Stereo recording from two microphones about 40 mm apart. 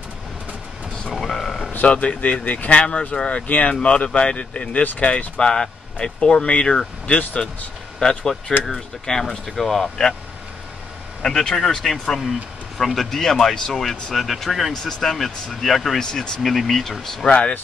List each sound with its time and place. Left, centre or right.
1.2 s a sound: centre
1.9 s speech: left
5.4 s speech: centre
7.1 s speech: left
8.0 s speech: centre
11.2 s speech: centre
14.7 s speech: centre
16.4 s speech: centre
17.3 s speech: left